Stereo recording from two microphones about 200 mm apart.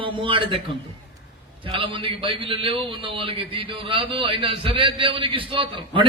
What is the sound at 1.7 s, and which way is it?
A man's voice, 25° right (ahead or behind).